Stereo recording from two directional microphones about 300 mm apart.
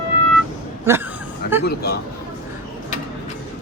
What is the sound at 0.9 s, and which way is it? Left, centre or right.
Speech, centre.